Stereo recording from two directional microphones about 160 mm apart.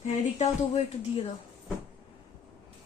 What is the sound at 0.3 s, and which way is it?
Speech, 40° left (ahead or behind).